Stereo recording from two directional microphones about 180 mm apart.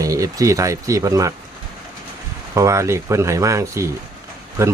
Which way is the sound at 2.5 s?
15° right (ahead or behind).